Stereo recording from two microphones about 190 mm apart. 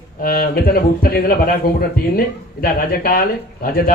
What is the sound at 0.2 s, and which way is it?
A man's voice, 50° left (ahead or behind).